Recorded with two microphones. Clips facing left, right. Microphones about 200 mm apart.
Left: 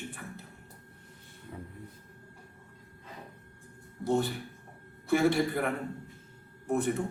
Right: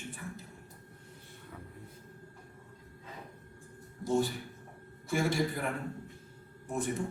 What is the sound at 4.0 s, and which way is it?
Speech, 60° left (ahead or behind).